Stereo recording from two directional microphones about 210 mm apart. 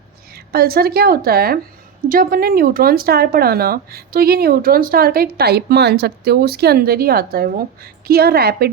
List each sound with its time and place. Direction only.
0.3 s speech: 45° right (ahead or behind)